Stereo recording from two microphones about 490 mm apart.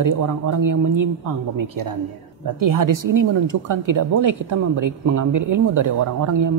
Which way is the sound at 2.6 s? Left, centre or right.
Right.